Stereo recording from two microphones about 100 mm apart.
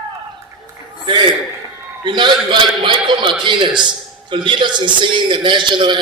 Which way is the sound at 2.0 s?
50° right (ahead or behind).